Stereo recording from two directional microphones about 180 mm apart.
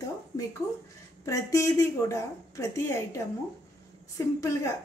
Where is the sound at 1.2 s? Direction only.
20° left (ahead or behind).